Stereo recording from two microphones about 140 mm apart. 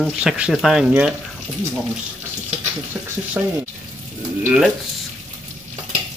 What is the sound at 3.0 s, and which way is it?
Speech, 15° right (ahead or behind).